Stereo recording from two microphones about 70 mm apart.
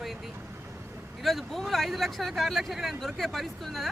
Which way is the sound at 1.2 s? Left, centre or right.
Centre.